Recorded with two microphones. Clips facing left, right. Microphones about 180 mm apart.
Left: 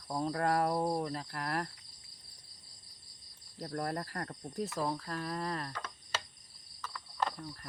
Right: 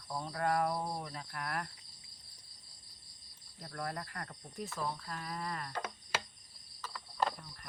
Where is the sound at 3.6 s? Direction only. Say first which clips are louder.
Left 5 dB; 40° left (ahead or behind).